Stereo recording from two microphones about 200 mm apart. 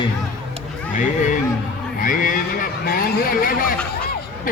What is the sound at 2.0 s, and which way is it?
Speech, 45° left (ahead or behind).